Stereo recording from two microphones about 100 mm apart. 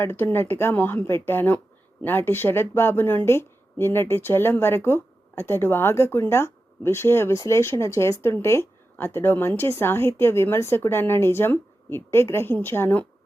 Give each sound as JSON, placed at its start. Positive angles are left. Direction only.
{"t": 0.0, "sound": "speech", "side_deg": 20}